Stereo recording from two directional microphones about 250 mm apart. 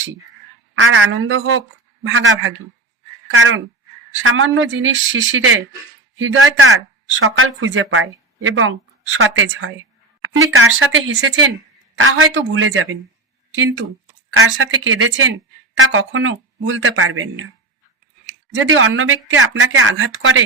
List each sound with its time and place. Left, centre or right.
0.8 s a woman's voice: right
18.5 s speech: right